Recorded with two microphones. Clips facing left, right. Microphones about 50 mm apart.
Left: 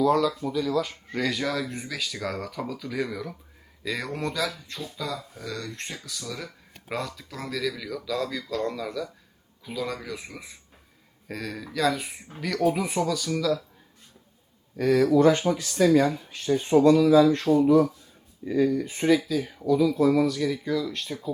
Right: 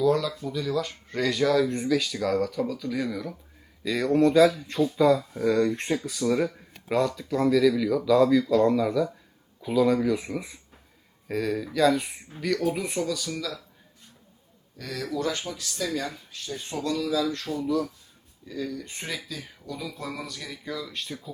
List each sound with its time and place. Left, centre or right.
0.0 s speech: centre
4.8 s speech: centre
6.9 s speech: centre
14.8 s speech: left
18.9 s speech: centre